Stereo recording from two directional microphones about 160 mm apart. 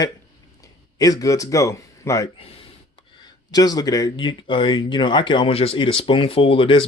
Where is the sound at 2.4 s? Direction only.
40° left (ahead or behind).